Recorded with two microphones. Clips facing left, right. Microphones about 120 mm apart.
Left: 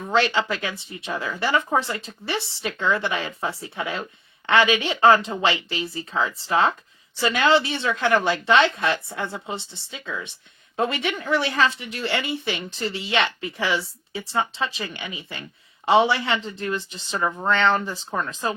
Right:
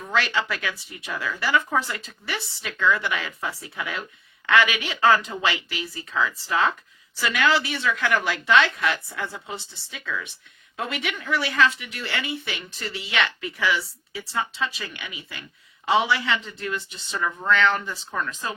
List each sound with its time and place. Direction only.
0.1 s a woman's voice: 30° left (ahead or behind)